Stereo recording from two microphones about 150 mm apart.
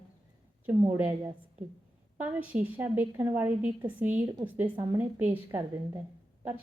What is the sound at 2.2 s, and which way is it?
Speech, 15° right (ahead or behind).